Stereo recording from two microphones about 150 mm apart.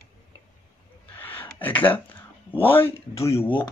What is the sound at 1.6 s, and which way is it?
Speech, 10° left (ahead or behind).